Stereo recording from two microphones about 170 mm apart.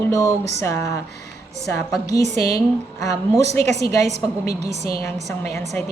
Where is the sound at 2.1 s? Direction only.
20° left (ahead or behind).